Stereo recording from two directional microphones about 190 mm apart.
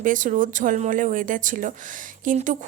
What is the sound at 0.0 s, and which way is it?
Speech, 45° right (ahead or behind).